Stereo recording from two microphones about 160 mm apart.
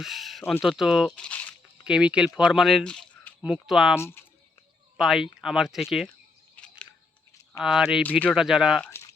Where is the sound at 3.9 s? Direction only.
15° left (ahead or behind).